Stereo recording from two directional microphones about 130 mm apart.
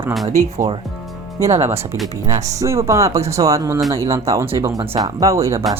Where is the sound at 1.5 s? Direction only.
55° right (ahead or behind).